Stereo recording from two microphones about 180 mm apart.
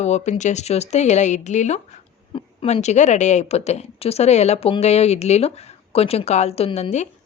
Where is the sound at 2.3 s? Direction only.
30° left (ahead or behind).